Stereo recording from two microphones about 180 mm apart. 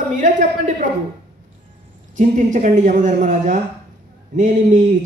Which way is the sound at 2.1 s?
45° right (ahead or behind).